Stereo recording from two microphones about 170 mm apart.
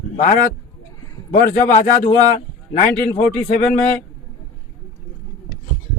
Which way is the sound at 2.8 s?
45° left (ahead or behind).